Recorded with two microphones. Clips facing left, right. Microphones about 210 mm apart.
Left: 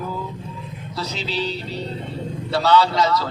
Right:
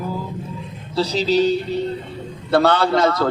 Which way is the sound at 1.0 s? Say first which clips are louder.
Right 10 dB; 40° right (ahead or behind).